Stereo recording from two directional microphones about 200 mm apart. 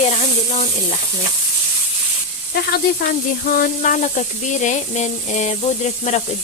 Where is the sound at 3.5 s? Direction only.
40° left (ahead or behind).